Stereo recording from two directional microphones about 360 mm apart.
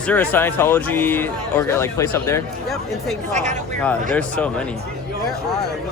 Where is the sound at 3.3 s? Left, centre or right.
Centre.